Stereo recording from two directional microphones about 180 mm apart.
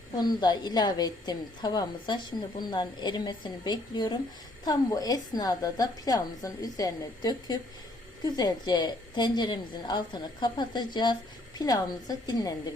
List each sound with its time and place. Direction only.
0.2 s a woman's voice: 25° left (ahead or behind)